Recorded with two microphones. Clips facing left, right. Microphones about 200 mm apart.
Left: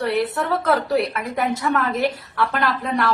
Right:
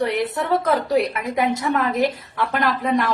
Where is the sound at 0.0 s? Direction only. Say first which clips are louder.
Even; 20° right (ahead or behind).